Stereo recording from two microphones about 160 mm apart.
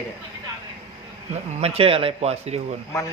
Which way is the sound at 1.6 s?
40° right (ahead or behind).